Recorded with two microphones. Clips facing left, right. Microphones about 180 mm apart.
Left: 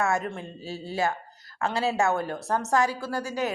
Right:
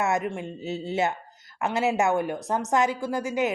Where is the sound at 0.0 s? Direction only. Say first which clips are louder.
Right 1 dB; 20° right (ahead or behind).